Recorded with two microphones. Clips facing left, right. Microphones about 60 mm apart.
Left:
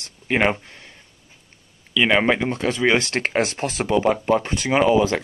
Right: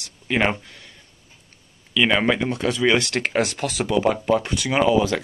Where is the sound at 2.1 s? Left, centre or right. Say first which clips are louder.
Left 2 dB; left.